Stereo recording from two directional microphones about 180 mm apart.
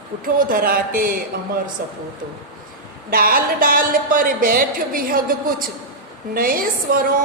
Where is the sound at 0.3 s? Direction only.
50° right (ahead or behind).